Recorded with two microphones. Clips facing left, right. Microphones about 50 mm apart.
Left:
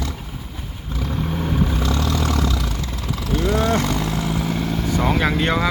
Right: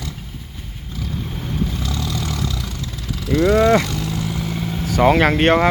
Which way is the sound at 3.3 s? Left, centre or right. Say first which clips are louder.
Right 6 dB; right.